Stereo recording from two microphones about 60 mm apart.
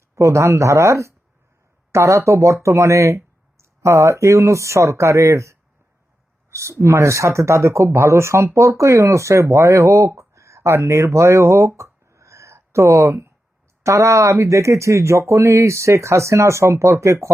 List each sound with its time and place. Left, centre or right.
0.2 s speech: right
10.2 s a sound: right
13.8 s speech: right